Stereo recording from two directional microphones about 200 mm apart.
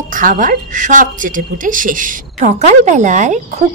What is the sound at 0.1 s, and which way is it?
A woman's voice, 40° right (ahead or behind).